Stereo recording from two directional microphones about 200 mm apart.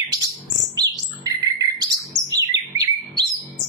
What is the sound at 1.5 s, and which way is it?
Bird, 20° right (ahead or behind).